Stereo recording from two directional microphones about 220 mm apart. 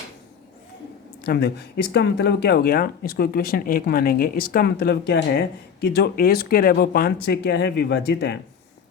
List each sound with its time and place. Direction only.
1.2 s speech: 45° left (ahead or behind)